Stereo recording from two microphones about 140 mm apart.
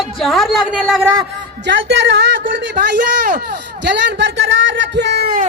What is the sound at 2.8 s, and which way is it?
Speech, 70° right (ahead or behind).